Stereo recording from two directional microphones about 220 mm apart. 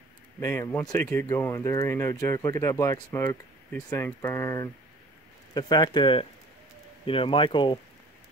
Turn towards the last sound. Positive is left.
turn(degrees=20)  # may be behind; listen again after turning